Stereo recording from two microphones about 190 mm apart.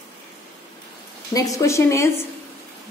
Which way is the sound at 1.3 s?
20° left (ahead or behind).